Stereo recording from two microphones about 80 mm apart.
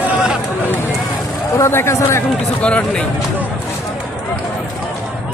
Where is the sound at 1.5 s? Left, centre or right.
Left.